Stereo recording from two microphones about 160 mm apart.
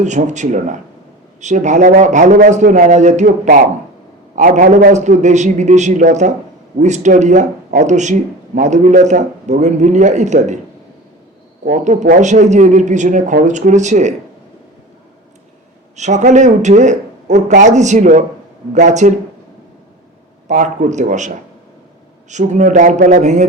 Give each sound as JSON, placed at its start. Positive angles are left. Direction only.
{"t": 0.0, "sound": "speech", "side_deg": -50}
{"t": 11.6, "sound": "speech", "side_deg": -50}
{"t": 16.0, "sound": "speech", "side_deg": -45}
{"t": 20.5, "sound": "speech", "side_deg": -50}